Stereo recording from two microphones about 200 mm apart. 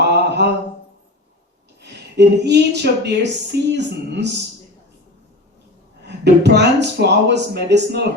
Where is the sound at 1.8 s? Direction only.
60° right (ahead or behind).